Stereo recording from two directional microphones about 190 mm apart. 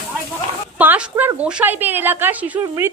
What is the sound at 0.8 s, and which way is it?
A woman's voice, 10° right (ahead or behind).